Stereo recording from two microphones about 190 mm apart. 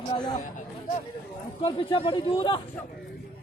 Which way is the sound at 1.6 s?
25° left (ahead or behind).